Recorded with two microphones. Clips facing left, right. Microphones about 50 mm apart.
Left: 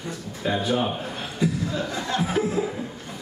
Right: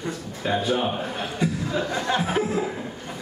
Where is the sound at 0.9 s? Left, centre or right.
Right.